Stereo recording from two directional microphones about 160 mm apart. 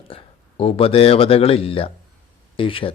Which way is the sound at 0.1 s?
35° left (ahead or behind).